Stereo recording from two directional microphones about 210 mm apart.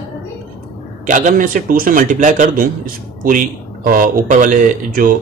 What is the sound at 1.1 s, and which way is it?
Speech, 40° right (ahead or behind).